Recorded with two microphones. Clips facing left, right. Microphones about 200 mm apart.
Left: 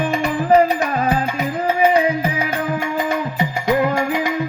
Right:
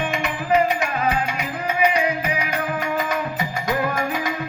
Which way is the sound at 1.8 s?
30° left (ahead or behind).